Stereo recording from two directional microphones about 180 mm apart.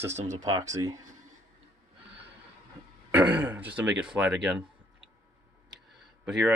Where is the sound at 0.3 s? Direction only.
20° right (ahead or behind).